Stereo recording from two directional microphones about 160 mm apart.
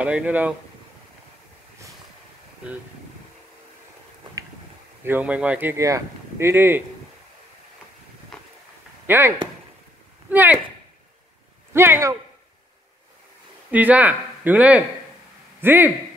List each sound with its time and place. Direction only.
0.0 s speech: 10° right (ahead or behind)
5.0 s speech: 10° right (ahead or behind)
8.3 s a sound: 5° left (ahead or behind)
9.0 s speech: 15° right (ahead or behind)
10.3 s speech: 10° right (ahead or behind)
11.7 s speech: 15° right (ahead or behind)
13.7 s speech: 10° right (ahead or behind)